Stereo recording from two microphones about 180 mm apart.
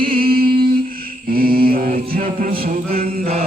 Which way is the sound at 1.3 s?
55° right (ahead or behind).